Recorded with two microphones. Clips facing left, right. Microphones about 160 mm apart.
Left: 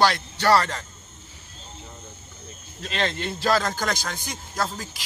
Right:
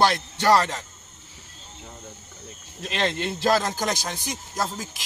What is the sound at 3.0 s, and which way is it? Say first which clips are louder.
Speech: right 2 dB; 20° right (ahead or behind).